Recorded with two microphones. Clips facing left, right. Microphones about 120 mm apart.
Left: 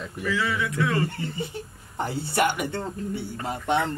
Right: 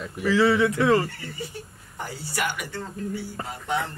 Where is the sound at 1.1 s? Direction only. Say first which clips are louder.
Left 4 dB; 25° left (ahead or behind).